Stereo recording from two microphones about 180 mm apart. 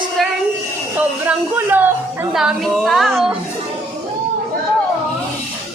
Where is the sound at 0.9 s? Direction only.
10° right (ahead or behind).